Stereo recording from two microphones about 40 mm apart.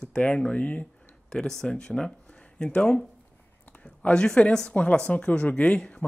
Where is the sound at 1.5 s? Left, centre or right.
Centre.